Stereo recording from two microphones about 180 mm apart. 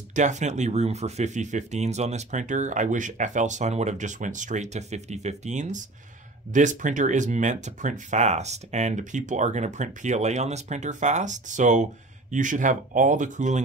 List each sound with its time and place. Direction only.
0.1 s speech: 40° right (ahead or behind)